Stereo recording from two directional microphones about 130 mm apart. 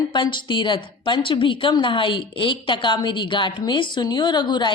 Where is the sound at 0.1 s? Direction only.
35° left (ahead or behind).